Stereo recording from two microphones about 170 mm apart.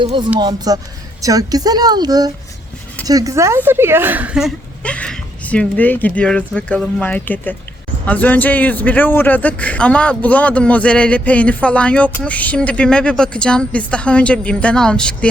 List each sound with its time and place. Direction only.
0.0 s a man's voice: 30° right (ahead or behind); by 15.3 s 5° left (ahead or behind)